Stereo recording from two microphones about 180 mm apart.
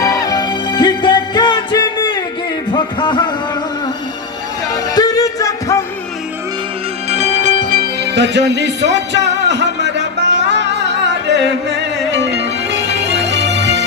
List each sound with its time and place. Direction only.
0.0 s music: 20° left (ahead or behind)
2.7 s a sound: 25° left (ahead or behind)
4.9 s music: 20° left (ahead or behind)
7.1 s music: 40° right (ahead or behind); by 13.8 s 75° right (ahead or behind)